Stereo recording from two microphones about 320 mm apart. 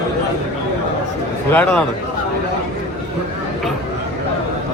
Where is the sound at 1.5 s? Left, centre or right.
Centre.